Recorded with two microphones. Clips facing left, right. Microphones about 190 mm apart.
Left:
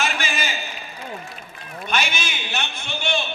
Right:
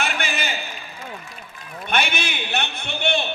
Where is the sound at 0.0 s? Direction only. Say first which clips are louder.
Even; 60° right (ahead or behind).